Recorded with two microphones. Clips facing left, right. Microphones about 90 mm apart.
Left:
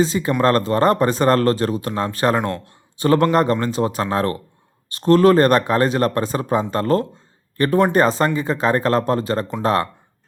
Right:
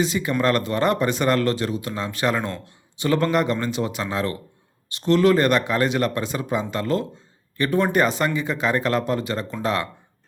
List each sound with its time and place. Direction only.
0.0 s speech: 35° left (ahead or behind)